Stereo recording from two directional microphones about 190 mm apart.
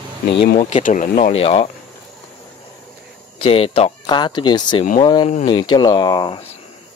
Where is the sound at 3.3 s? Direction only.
30° left (ahead or behind).